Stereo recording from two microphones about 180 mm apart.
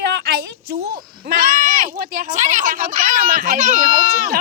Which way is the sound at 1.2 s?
55° right (ahead or behind).